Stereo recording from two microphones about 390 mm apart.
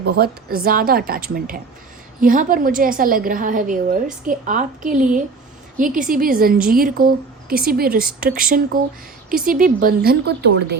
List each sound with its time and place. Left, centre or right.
0.0 s a woman's voice: right
2.2 s a woman's voice: right